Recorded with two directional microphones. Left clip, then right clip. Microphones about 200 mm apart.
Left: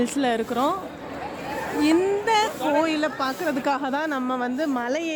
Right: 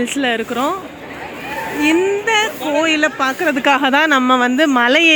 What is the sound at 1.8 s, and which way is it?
Speech, centre (ahead or behind).